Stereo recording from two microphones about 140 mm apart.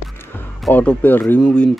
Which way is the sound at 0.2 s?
15° left (ahead or behind).